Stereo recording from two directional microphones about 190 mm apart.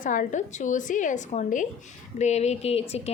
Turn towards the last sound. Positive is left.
turn(degrees=35)  # may be behind; listen again after turning